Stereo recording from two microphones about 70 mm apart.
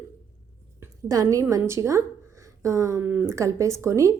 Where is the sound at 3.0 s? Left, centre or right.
Right.